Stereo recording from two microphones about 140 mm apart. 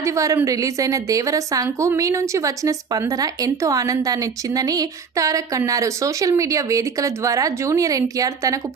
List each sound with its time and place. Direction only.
0.0 s a woman's voice: 20° right (ahead or behind)